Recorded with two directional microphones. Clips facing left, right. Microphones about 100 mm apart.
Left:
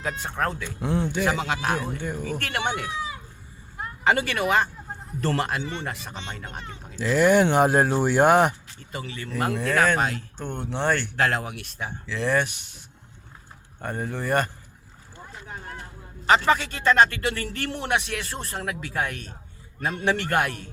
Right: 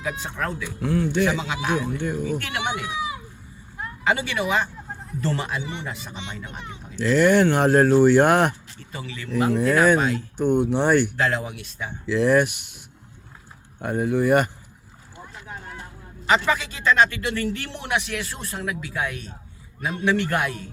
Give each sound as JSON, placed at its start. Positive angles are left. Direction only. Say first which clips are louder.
{"t": 0.0, "sound": "speech", "louder": "left 1 dB", "side_deg": 45}
{"t": 0.8, "sound": "a man's voice", "louder": "right 3 dB", "side_deg": 20}
{"t": 1.3, "sound": "speech", "louder": "right 1 dB", "side_deg": 50}
{"t": 2.9, "sound": "a child's voice", "louder": "right 3 dB", "side_deg": -15}
{"t": 4.0, "sound": "speech", "louder": "left 1 dB", "side_deg": 50}
{"t": 7.0, "sound": "speech", "louder": "right 2 dB", "side_deg": 10}
{"t": 9.0, "sound": "speech", "louder": "even", "side_deg": 35}
{"t": 9.6, "sound": "speech", "louder": "right 3 dB", "side_deg": -5}
{"t": 11.2, "sound": "speech", "louder": "even", "side_deg": 60}
{"t": 12.0, "sound": "speech", "louder": "right 6 dB", "side_deg": -5}
{"t": 13.8, "sound": "speech", "louder": "right 8 dB", "side_deg": -5}
{"t": 16.2, "sound": "speech", "louder": "left 1 dB", "side_deg": 40}
{"t": 18.5, "sound": "speech", "louder": "even", "side_deg": 50}